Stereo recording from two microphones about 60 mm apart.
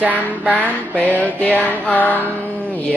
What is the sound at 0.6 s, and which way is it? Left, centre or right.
Speech, left.